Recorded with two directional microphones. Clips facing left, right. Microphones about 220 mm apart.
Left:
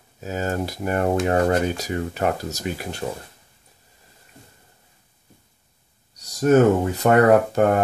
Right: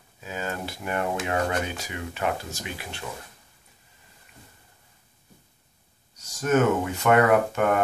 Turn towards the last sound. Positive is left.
turn(degrees=35)  # may be behind; listen again after turning